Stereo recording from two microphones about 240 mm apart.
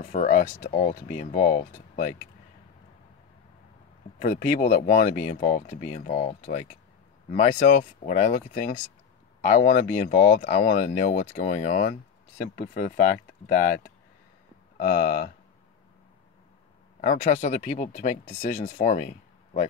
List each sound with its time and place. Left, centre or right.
0.0 s speech: left
4.2 s speech: left
14.8 s speech: left
17.0 s speech: left